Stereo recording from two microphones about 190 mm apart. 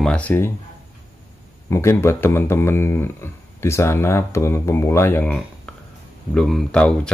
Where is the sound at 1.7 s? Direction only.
15° left (ahead or behind).